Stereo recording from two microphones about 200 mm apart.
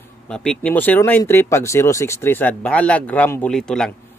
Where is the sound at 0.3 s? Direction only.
5° left (ahead or behind).